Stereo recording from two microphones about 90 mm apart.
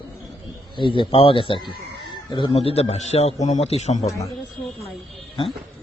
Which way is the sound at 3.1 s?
90° left.